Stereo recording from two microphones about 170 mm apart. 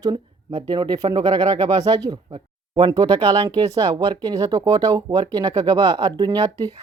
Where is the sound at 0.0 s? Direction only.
25° right (ahead or behind).